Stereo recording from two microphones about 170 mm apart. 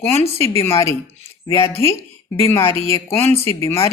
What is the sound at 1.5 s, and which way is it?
Speech, 15° left (ahead or behind).